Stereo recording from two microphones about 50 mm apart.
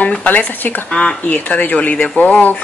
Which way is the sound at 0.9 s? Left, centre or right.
Left.